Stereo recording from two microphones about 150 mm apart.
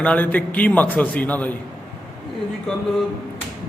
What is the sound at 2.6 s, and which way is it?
Speech, centre (ahead or behind).